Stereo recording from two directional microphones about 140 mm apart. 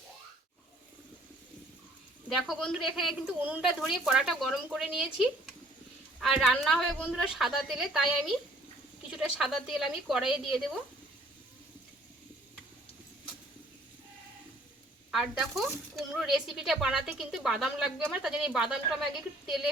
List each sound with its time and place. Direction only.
2.5 s speech: centre (ahead or behind)
15.1 s speech: centre (ahead or behind)